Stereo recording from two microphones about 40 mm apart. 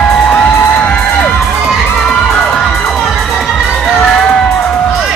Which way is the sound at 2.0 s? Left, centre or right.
Centre.